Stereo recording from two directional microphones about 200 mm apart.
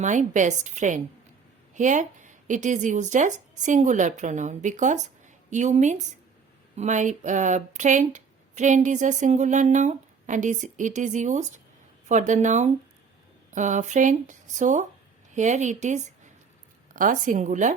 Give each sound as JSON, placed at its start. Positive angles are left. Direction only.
{"t": 0.0, "sound": "speech", "side_deg": -40}